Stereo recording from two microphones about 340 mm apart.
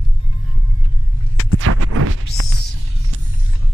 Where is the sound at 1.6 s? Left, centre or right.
Right.